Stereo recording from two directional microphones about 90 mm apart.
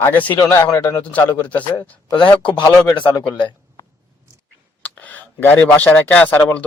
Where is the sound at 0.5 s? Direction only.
30° left (ahead or behind).